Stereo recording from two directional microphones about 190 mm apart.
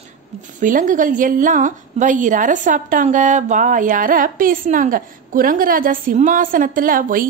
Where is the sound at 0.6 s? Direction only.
45° right (ahead or behind).